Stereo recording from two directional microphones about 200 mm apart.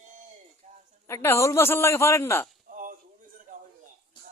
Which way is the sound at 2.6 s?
40° right (ahead or behind).